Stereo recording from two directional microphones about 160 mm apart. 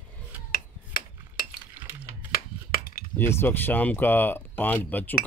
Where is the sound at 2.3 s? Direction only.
65° left (ahead or behind).